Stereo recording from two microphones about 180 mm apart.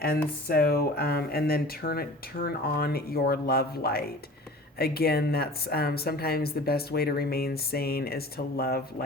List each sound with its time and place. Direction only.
0.4 s speech: 55° left (ahead or behind)